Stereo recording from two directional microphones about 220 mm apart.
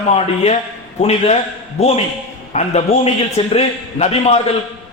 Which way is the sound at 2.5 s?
30° left (ahead or behind).